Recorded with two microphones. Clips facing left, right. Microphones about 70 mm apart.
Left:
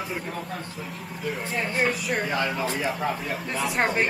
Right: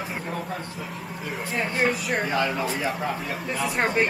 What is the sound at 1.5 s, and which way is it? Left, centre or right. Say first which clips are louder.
Speech: right 2 dB; centre.